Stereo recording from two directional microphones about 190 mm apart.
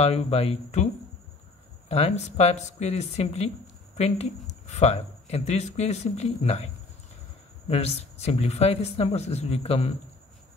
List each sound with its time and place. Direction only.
0.0 s speech: 35° left (ahead or behind)
1.9 s speech: 35° left (ahead or behind)